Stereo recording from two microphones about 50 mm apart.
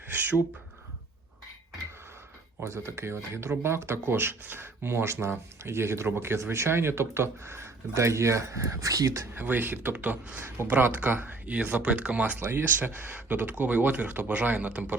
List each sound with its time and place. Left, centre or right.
0.1 s a sound: right
2.6 s speech: right
9.3 s speech: right
9.9 s speech: right
11.4 s speech: right
12.4 s speech: right
13.2 s speech: right